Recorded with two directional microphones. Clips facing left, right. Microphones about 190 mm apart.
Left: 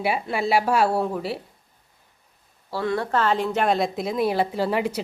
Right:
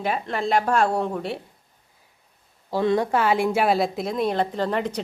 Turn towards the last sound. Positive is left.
turn(degrees=5)  # may be behind; listen again after turning